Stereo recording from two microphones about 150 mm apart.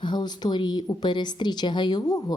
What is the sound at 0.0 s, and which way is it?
A woman's voice, 30° left (ahead or behind).